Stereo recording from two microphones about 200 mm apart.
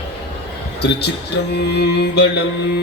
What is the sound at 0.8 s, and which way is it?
Speech, 55° left (ahead or behind).